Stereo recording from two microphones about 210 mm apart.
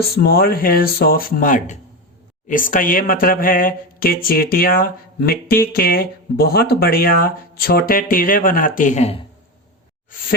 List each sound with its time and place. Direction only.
0.2 s speech: 45° left (ahead or behind); by 9.2 s 30° left (ahead or behind)